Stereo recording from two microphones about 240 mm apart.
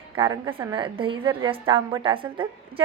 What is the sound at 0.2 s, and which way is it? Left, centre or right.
A woman's voice, centre.